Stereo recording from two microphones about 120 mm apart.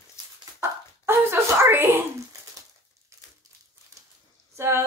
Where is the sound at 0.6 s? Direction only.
20° right (ahead or behind).